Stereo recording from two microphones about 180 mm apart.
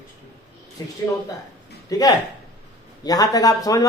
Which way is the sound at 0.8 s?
20° left (ahead or behind).